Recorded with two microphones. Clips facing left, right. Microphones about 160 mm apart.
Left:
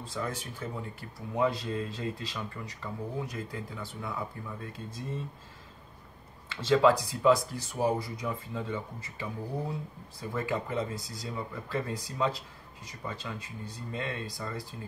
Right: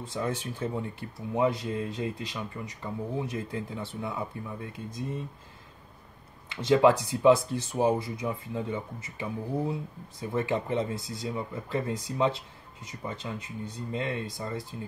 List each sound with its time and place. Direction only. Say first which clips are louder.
0.0 s speech: right 4 dB; 25° right (ahead or behind)
6.5 s speech: right 2 dB; 20° right (ahead or behind)